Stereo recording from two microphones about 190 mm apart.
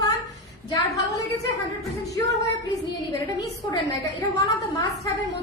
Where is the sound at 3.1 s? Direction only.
20° left (ahead or behind).